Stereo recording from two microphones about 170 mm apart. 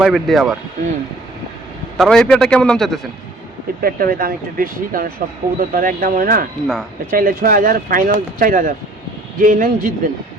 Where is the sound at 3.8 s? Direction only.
60° right (ahead or behind).